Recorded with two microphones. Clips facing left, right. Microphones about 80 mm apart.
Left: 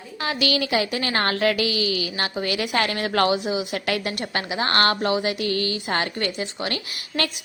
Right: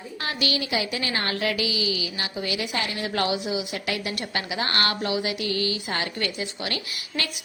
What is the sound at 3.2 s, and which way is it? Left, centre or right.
A woman's voice, left.